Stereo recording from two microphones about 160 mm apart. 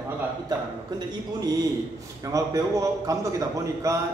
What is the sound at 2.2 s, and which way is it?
A man's voice, 20° right (ahead or behind).